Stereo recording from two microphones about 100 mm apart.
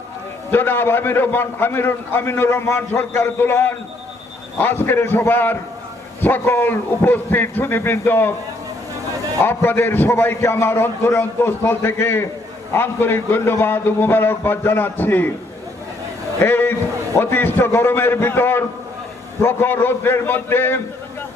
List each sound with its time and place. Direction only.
0.5 s a man's voice: 20° left (ahead or behind)
9.4 s a man's voice: 25° left (ahead or behind)
16.4 s a man's voice: 20° left (ahead or behind)